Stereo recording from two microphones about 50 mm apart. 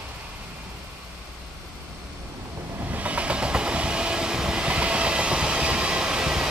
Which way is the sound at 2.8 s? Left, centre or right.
Right.